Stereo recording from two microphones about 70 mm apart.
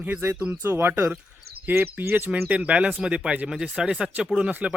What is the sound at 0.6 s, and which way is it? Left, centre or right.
Speech, right.